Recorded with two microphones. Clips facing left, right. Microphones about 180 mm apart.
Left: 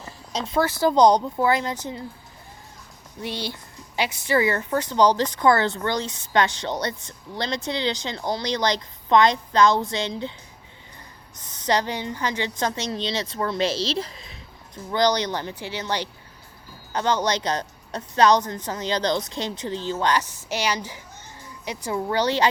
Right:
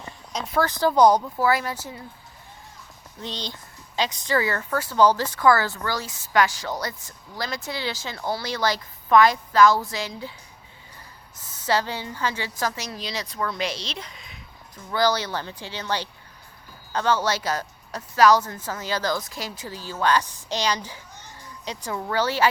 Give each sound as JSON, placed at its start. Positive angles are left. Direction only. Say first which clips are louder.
{"t": 0.4, "sound": "a woman's voice", "louder": "left 1 dB", "side_deg": 20}
{"t": 3.5, "sound": "a woman's voice", "louder": "even", "side_deg": 15}
{"t": 11.6, "sound": "a woman's voice", "louder": "left 1 dB", "side_deg": 20}
{"t": 14.8, "sound": "a woman's voice", "louder": "left 2 dB", "side_deg": 20}